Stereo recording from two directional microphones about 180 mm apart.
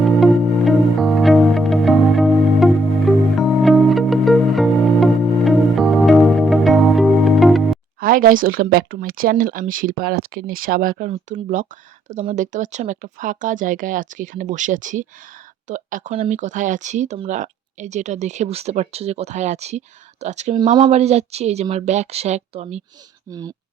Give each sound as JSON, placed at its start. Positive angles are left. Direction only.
{"t": 0.0, "sound": "music", "side_deg": 0}
{"t": 8.0, "sound": "speech", "side_deg": -50}
{"t": 23.3, "sound": "speech", "side_deg": -20}